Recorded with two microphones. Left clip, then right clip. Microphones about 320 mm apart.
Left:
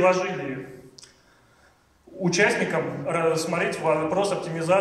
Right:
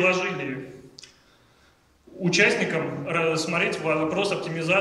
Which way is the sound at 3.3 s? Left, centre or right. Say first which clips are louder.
Left 1 dB; left.